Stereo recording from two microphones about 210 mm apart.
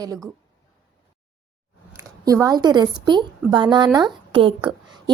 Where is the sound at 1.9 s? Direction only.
15° right (ahead or behind).